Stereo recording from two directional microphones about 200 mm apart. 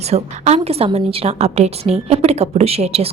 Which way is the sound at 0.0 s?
30° right (ahead or behind).